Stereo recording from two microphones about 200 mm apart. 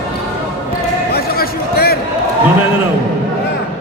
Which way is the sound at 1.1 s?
50° left (ahead or behind).